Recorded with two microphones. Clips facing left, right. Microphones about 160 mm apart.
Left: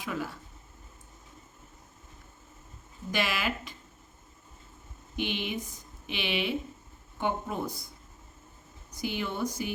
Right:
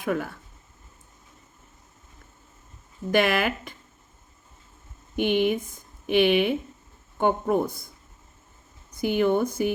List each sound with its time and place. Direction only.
0.0 s speech: 55° right (ahead or behind)
3.1 s speech: 55° right (ahead or behind)
5.1 s speech: 50° right (ahead or behind)
8.9 s speech: 55° right (ahead or behind)